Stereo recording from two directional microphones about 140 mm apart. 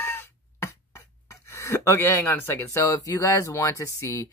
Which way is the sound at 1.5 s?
20° left (ahead or behind).